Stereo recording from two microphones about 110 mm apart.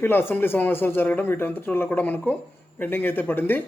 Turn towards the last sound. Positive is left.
turn(degrees=15)  # may be behind; listen again after turning